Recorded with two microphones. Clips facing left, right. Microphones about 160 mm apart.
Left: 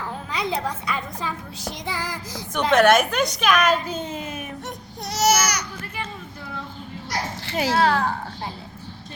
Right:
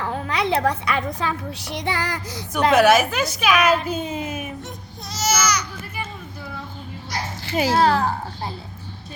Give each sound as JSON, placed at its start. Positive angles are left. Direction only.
{"t": 0.0, "sound": "a woman's voice", "side_deg": -70}
{"t": 2.5, "sound": "a woman's voice", "side_deg": -5}
{"t": 5.0, "sound": "baby cry", "side_deg": 70}
{"t": 7.4, "sound": "a sound", "side_deg": 0}
{"t": 7.8, "sound": "speech", "side_deg": -35}